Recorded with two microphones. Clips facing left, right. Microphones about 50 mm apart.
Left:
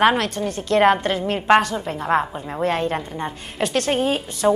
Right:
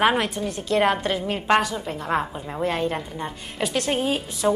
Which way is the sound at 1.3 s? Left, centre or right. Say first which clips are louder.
Left 5 dB; centre.